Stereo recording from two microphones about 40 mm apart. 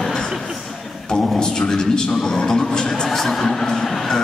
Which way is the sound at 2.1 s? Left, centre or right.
Centre.